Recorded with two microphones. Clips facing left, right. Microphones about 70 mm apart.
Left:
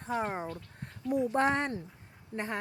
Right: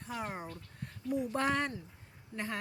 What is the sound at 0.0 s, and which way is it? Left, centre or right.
Speech, left.